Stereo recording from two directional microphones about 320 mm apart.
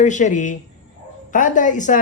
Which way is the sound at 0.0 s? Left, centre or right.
Left.